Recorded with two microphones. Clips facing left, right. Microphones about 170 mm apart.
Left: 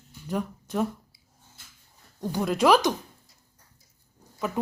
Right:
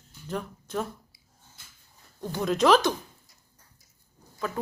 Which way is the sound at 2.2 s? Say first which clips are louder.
Left 1 dB; 10° left (ahead or behind).